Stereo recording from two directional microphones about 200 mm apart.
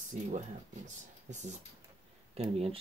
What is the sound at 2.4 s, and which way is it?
Speech, 30° right (ahead or behind).